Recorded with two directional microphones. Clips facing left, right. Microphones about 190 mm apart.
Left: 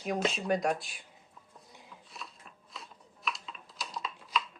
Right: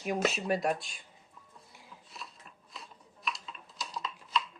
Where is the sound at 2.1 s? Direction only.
Centre (ahead or behind).